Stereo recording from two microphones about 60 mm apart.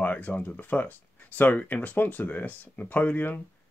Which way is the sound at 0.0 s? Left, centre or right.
Left.